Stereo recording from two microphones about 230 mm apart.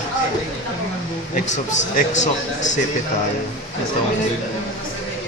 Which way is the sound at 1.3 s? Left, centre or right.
Left.